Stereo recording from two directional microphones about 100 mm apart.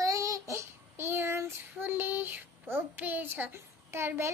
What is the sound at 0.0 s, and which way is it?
Child singing, 35° right (ahead or behind).